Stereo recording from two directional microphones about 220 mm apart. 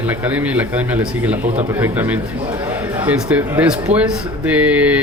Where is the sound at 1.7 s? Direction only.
10° right (ahead or behind).